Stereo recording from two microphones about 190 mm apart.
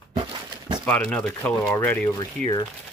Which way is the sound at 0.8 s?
5° left (ahead or behind).